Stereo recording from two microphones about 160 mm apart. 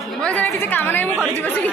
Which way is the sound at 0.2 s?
10° left (ahead or behind).